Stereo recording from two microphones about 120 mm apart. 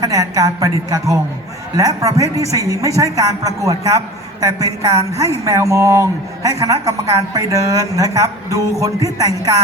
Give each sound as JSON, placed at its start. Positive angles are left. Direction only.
{"t": 0.0, "sound": "a woman's voice", "side_deg": -30}